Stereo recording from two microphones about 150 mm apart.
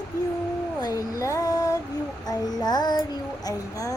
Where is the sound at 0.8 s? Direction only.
20° left (ahead or behind).